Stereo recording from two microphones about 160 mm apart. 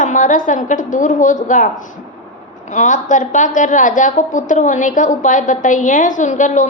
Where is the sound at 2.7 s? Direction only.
50° left (ahead or behind).